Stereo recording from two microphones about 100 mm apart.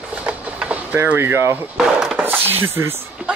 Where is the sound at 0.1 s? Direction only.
15° right (ahead or behind).